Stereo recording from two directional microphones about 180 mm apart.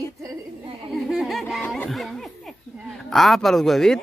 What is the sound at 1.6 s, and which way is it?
Speech, 5° left (ahead or behind).